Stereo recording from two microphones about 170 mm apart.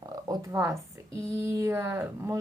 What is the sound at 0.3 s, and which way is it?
Speech, 20° right (ahead or behind).